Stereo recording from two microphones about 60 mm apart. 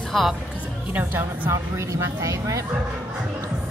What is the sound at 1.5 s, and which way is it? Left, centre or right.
Speech, right.